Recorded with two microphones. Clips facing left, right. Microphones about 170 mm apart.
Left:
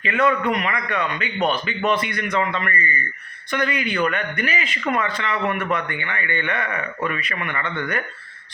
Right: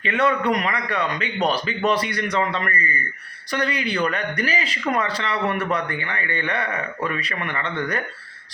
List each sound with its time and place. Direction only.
0.0 s speech: 35° right (ahead or behind)